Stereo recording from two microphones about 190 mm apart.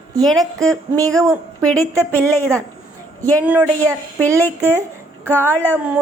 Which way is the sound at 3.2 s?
10° right (ahead or behind).